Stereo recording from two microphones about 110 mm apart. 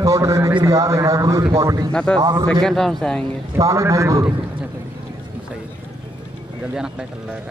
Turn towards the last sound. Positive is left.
turn(degrees=-5)  # may be behind; listen again after turning